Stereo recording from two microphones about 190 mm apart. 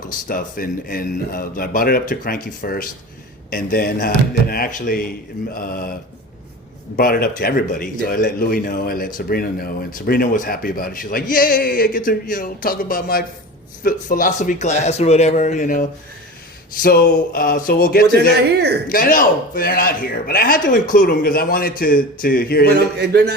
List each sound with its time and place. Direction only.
0.3 s speech: 50° left (ahead or behind)
6.9 s a man's voice: 50° left (ahead or behind)
23.0 s a sound: 60° right (ahead or behind)